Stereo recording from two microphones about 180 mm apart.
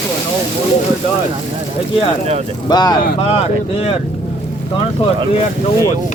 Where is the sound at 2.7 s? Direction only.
20° left (ahead or behind).